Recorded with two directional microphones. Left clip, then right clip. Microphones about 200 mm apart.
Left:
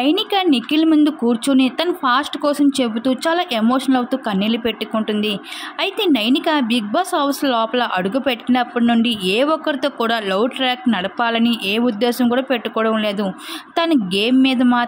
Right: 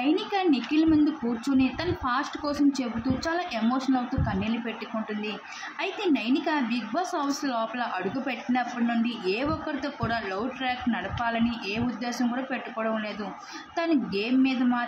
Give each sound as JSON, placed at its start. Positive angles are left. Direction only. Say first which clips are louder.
{"t": 0.0, "sound": "a woman's voice", "louder": "left 9 dB", "side_deg": 50}